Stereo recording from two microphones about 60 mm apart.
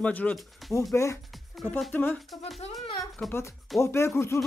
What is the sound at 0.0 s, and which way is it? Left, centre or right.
Speech, left.